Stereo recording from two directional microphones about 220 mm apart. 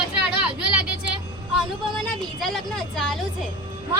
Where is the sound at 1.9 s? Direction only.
Centre (ahead or behind).